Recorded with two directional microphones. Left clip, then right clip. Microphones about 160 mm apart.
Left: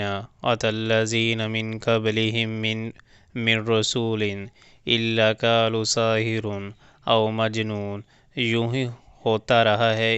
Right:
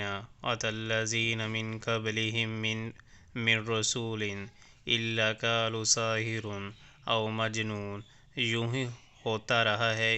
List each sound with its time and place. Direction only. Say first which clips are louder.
0.0 s speech: left 9 dB; 50° left (ahead or behind)
6.5 s speech: left 7 dB; 30° left (ahead or behind)
7.0 s speech: left 9 dB; 45° left (ahead or behind)
7.8 s speech: left 8 dB; 25° left (ahead or behind)
8.4 s speech: left 7 dB; 45° left (ahead or behind)